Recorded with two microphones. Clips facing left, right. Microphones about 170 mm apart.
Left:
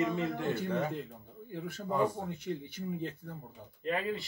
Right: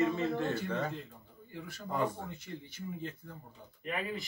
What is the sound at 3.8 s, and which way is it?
Speech, 30° left (ahead or behind).